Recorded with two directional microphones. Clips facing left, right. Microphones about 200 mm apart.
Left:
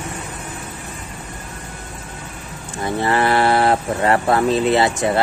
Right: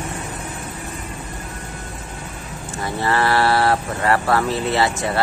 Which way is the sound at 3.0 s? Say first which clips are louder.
Left 2 dB; 20° left (ahead or behind).